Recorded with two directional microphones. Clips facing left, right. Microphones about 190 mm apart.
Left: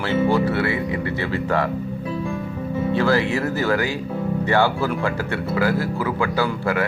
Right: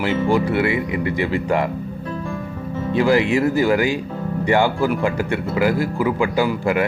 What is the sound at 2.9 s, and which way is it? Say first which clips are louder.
Speech: right 4 dB; 15° right (ahead or behind).